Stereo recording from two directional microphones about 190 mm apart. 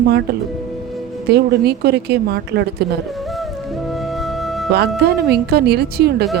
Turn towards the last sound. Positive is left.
turn(degrees=-55)  # may be behind; listen again after turning